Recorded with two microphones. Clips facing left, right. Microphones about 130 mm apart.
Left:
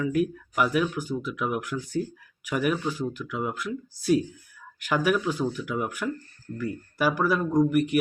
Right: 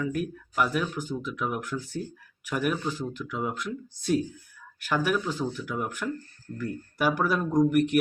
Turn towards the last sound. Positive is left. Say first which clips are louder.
# even
turn(degrees=0)  # may be behind; listen again after turning